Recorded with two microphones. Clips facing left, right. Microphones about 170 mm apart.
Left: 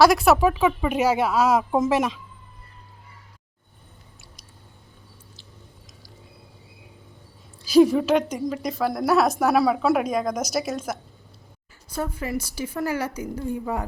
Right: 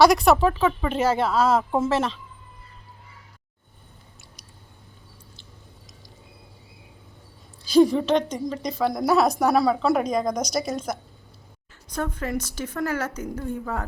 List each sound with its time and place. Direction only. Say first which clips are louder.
0.0 s speech: even; 5° left (ahead or behind)
7.6 s a woman's voice: left 1 dB; 5° left (ahead or behind)